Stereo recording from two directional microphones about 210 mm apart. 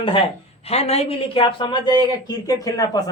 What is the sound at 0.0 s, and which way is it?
Speech, 25° left (ahead or behind).